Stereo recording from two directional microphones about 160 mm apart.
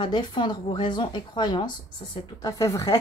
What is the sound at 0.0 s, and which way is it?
A woman's voice, 30° left (ahead or behind).